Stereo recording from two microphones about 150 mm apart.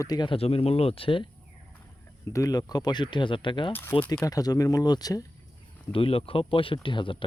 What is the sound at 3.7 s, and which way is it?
Speech, 15° left (ahead or behind).